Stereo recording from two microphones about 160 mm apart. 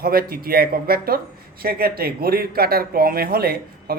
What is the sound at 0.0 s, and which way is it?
Speech, 70° right (ahead or behind).